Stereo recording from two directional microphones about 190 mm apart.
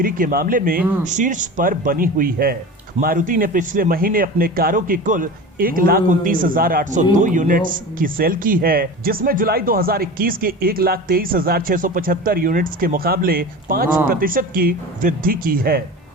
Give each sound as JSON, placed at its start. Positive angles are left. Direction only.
{"t": 0.0, "sound": "speech", "side_deg": -50}